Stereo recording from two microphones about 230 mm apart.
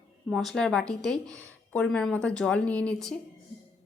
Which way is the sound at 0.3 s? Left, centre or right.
Centre.